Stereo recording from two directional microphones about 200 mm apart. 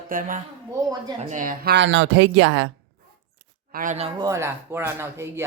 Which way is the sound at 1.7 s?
65° right (ahead or behind).